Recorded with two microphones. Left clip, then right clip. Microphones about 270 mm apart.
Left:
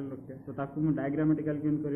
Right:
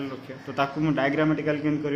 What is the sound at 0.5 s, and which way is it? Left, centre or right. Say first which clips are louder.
A man's voice: right 8 dB; right.